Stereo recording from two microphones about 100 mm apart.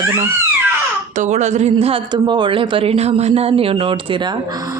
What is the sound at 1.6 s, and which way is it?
Speech, 80° right.